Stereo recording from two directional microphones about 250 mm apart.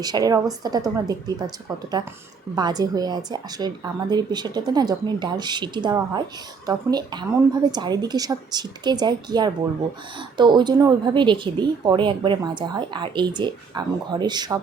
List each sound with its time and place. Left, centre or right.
0.0 s a woman's voice: centre
2.6 s a woman's voice: centre